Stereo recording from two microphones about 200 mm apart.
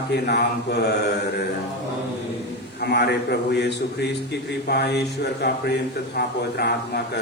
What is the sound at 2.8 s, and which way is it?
A man's voice, 55° left (ahead or behind).